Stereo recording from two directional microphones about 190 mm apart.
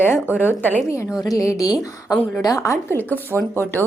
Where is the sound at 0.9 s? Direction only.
15° left (ahead or behind).